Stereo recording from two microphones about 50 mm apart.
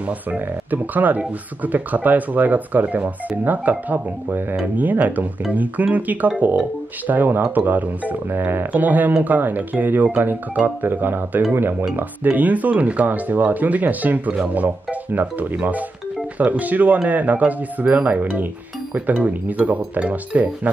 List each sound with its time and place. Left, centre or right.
0.3 s speech: right